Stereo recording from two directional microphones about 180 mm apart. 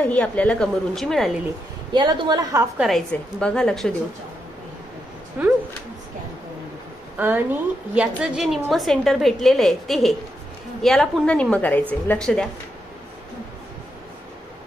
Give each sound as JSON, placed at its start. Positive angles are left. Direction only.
{"t": 0.1, "sound": "a woman's voice", "side_deg": 5}
{"t": 1.9, "sound": "a woman's voice", "side_deg": -25}
{"t": 2.8, "sound": "a woman's voice", "side_deg": 5}
{"t": 5.4, "sound": "speech", "side_deg": -5}
{"t": 7.2, "sound": "a woman's voice", "side_deg": -10}